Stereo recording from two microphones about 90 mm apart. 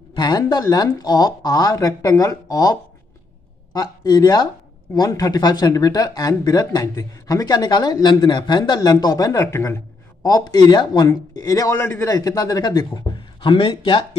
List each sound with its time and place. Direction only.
0.1 s speech: 55° left (ahead or behind); by 9.8 s 35° left (ahead or behind)
10.2 s speech: 50° left (ahead or behind)
11.3 s speech: 40° left (ahead or behind)
12.2 s a man's voice: 45° left (ahead or behind)
13.5 s speech: 75° left (ahead or behind)